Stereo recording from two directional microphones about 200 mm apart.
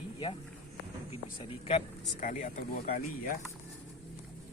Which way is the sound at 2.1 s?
40° left (ahead or behind).